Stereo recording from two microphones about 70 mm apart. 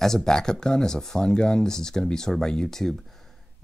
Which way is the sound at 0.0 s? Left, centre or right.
Centre.